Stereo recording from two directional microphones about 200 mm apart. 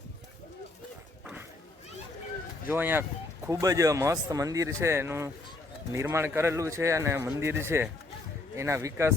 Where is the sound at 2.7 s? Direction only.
10° right (ahead or behind).